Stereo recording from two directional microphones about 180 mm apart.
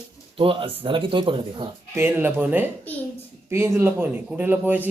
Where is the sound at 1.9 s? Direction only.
10° right (ahead or behind).